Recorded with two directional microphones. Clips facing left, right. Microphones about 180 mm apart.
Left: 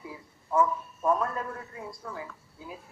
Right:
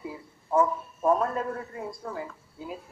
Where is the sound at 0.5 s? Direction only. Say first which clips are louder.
Right 2 dB; 30° right (ahead or behind).